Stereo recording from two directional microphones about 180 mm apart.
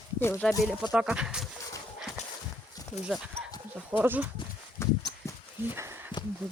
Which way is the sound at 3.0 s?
5° right (ahead or behind).